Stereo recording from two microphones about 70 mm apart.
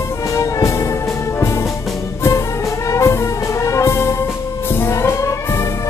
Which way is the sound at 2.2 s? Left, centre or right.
Left.